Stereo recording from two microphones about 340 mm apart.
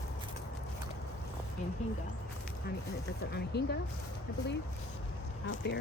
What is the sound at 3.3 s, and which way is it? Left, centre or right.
Speech, left.